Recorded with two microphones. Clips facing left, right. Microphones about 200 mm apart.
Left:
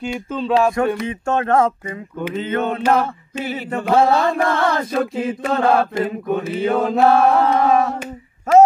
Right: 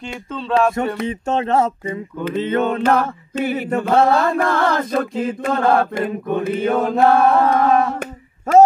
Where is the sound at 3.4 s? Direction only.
55° right (ahead or behind).